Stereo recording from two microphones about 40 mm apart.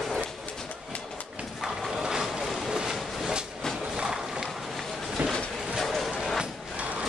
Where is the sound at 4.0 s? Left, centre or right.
Centre.